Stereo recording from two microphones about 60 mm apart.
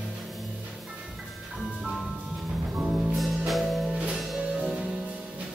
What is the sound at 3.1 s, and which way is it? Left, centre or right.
Music, centre.